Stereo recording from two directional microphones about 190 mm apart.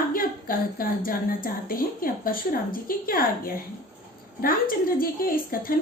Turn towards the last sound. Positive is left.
turn(degrees=50)  # may be behind; listen again after turning